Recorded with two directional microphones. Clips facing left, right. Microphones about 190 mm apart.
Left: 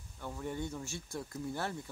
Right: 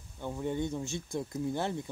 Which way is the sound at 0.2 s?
20° right (ahead or behind).